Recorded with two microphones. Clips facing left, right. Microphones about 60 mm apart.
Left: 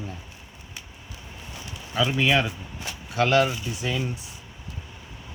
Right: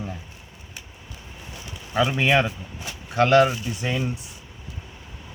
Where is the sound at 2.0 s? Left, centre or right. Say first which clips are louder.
Right 1 dB; right.